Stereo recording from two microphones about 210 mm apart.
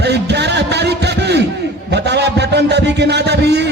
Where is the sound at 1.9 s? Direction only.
55° right (ahead or behind).